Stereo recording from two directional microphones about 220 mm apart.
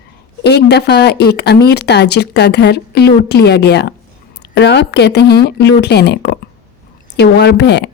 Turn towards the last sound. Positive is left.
turn(degrees=50)  # may be behind; listen again after turning